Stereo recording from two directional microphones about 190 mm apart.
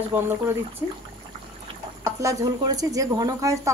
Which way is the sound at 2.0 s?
15° right (ahead or behind).